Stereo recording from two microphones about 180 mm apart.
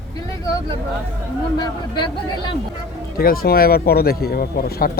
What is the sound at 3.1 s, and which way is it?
Speech, 55° left (ahead or behind).